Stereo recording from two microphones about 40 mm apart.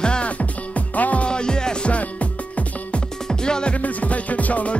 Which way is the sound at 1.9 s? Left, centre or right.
Left.